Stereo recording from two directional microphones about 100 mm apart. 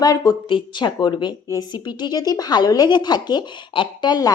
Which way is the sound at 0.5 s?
50° left (ahead or behind).